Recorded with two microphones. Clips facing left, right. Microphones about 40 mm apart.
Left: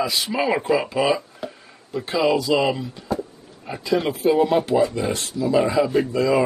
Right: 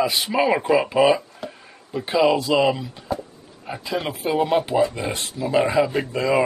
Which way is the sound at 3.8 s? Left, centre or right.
Centre.